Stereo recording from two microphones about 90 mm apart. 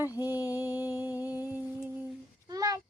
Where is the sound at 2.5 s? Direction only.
40° right (ahead or behind).